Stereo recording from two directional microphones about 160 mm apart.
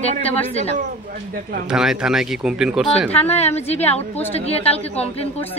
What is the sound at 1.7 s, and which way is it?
Speech, 5° right (ahead or behind).